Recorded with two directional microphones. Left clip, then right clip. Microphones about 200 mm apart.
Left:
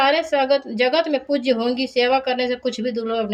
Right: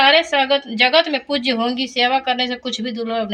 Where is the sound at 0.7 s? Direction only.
50° left (ahead or behind).